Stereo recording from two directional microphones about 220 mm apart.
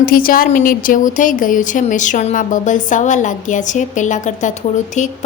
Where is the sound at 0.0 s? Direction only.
40° left (ahead or behind).